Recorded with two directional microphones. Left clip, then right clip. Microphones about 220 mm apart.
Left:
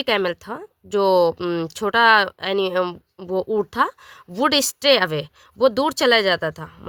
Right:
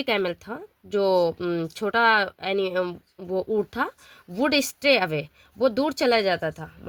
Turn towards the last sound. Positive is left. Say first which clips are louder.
# left 4 dB
turn(degrees=35)  # may be behind; listen again after turning